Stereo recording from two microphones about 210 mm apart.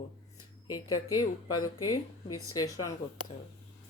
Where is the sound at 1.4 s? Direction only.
90° left.